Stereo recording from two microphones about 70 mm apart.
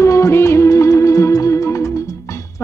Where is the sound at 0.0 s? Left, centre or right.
Left.